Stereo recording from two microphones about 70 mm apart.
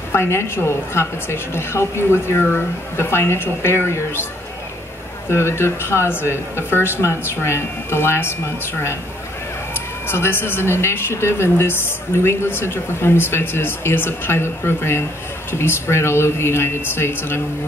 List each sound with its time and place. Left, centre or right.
0.1 s a woman's voice: left
5.3 s a woman's voice: left
10.0 s a woman's voice: left